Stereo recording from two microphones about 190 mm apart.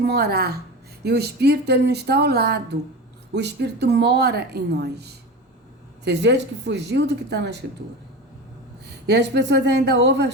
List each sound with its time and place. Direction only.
0.0 s a woman's voice: 55° right (ahead or behind)
9.0 s a woman's voice: 65° right (ahead or behind)